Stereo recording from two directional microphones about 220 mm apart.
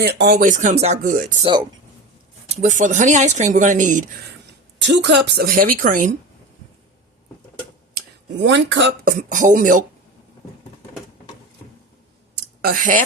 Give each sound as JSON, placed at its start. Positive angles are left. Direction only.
{"t": 0.0, "sound": "speech", "side_deg": -45}
{"t": 2.6, "sound": "speech", "side_deg": -35}
{"t": 4.8, "sound": "speech", "side_deg": -50}
{"t": 8.4, "sound": "speech", "side_deg": -55}
{"t": 9.0, "sound": "speech", "side_deg": -35}
{"t": 12.6, "sound": "speech", "side_deg": -40}